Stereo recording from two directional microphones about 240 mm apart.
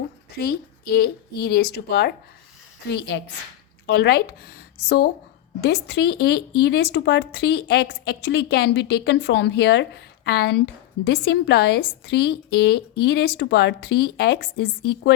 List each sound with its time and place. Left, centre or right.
0.3 s a woman's voice: left